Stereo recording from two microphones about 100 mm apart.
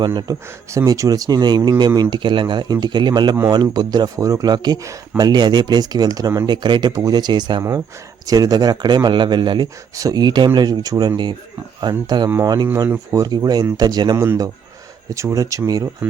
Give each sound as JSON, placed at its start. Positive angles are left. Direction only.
{"t": 0.0, "sound": "speech", "side_deg": -45}
{"t": 9.9, "sound": "speech", "side_deg": -35}
{"t": 12.6, "sound": "speech", "side_deg": -25}
{"t": 13.2, "sound": "speech", "side_deg": -40}